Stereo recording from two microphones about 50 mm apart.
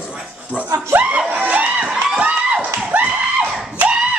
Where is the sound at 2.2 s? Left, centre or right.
Right.